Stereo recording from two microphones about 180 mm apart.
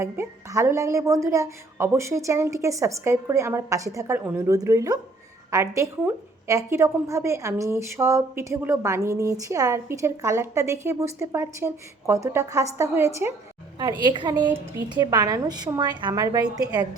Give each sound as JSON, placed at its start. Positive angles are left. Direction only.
{"t": 0.0, "sound": "a woman's voice", "side_deg": -15}